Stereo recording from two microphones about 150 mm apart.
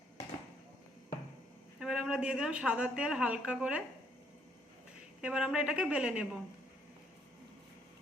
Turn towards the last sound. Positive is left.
turn(degrees=-5)  # may be behind; listen again after turning